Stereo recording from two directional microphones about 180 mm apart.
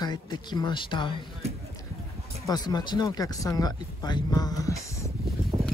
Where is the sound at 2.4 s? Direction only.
20° left (ahead or behind).